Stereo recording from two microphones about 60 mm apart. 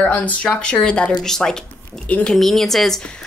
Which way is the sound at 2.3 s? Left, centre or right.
Centre.